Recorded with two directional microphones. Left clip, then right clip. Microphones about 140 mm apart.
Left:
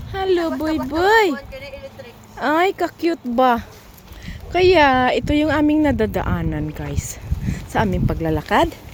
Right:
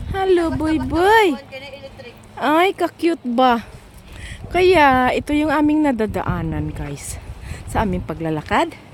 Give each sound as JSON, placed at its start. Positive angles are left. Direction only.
{"t": 0.1, "sound": "speech", "side_deg": -20}
{"t": 4.5, "sound": "speech", "side_deg": -15}
{"t": 7.7, "sound": "speech", "side_deg": -5}